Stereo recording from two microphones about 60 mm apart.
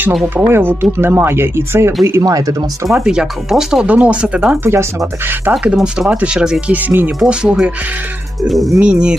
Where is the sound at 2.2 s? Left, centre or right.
Right.